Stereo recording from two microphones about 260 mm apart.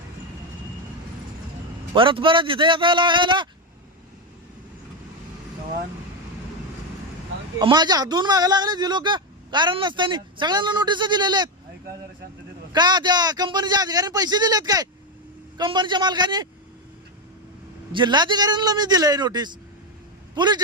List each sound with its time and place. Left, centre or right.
1.9 s speech: centre
7.6 s speech: centre
12.7 s speech: centre
17.9 s a man's voice: centre